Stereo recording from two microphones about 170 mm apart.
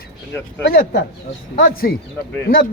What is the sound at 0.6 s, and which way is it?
Speech, 75° left (ahead or behind).